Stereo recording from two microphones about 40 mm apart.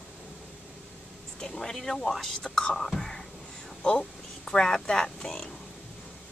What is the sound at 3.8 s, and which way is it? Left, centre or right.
Speech, left.